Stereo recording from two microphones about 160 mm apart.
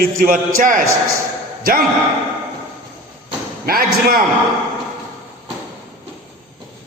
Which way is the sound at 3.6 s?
70° right (ahead or behind).